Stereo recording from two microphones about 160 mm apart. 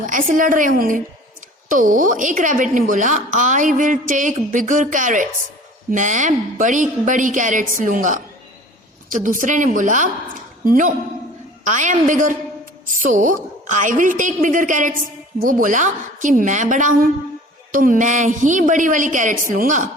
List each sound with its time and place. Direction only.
0.0 s a woman's voice: 55° right (ahead or behind)